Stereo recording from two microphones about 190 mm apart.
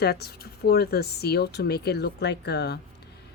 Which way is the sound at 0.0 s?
55° left (ahead or behind).